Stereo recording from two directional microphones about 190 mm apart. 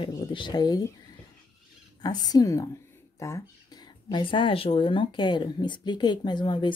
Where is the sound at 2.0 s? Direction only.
20° left (ahead or behind).